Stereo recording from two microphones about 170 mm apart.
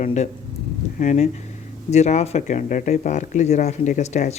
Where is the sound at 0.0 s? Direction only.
40° left (ahead or behind).